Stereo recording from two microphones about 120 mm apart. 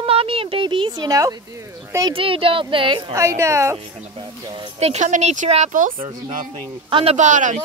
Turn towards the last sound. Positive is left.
turn(degrees=-90)